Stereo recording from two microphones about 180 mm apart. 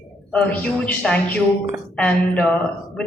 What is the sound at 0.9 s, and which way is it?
A man's voice, 5° left (ahead or behind).